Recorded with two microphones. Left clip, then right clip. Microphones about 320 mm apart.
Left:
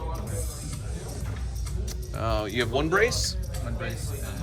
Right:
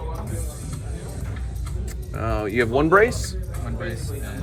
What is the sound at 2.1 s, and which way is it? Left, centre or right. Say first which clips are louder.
Speech: right 4 dB; centre.